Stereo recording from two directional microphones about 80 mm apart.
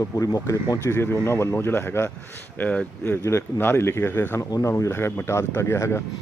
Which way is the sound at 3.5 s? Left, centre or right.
Left.